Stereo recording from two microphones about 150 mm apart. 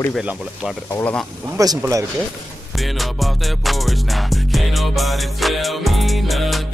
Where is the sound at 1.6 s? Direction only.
20° right (ahead or behind).